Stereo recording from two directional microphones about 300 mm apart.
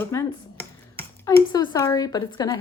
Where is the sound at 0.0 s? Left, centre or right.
Centre.